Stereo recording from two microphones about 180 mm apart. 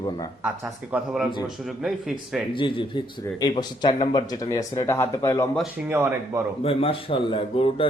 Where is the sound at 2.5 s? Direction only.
25° left (ahead or behind).